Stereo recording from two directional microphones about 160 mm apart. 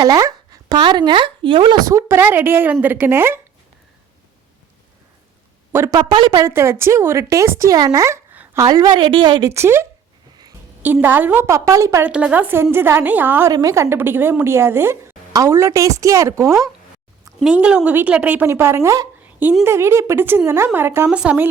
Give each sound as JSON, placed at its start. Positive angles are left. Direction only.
{"t": 0.0, "sound": "a woman's voice", "side_deg": -20}
{"t": 5.7, "sound": "a woman's voice", "side_deg": -15}
{"t": 6.0, "sound": "speech", "side_deg": -30}
{"t": 6.5, "sound": "a woman's voice", "side_deg": -15}
{"t": 8.6, "sound": "speech", "side_deg": -25}
{"t": 9.5, "sound": "a woman's voice", "side_deg": -15}
{"t": 11.0, "sound": "a woman's voice", "side_deg": -10}
{"t": 12.1, "sound": "a woman's voice", "side_deg": -10}
{"t": 13.5, "sound": "a woman's voice", "side_deg": -25}
{"t": 17.4, "sound": "a woman's voice", "side_deg": -5}